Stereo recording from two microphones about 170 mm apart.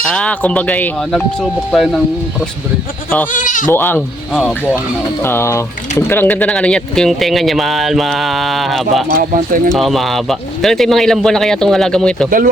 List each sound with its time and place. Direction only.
0.0 s speech: 5° left (ahead or behind)
3.3 s speech: 50° left (ahead or behind)
3.7 s speech: 10° left (ahead or behind)
4.3 s speech: centre (ahead or behind)
5.2 s speech: 15° left (ahead or behind)
9.1 s speech: 55° right (ahead or behind)
9.7 s speech: centre (ahead or behind)